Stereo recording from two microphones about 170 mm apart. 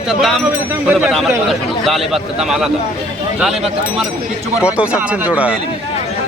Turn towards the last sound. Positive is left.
turn(degrees=-10)  # may be behind; listen again after turning